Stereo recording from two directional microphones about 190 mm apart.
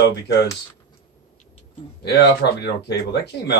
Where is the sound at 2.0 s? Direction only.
60° left (ahead or behind).